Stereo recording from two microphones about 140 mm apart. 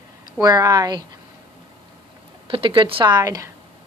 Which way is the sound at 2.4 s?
40° right (ahead or behind).